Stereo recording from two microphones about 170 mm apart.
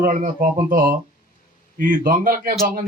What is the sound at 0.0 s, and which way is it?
A man's voice, 50° right (ahead or behind).